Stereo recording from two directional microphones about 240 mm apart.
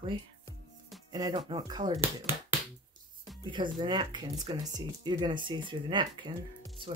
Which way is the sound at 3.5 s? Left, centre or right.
Centre.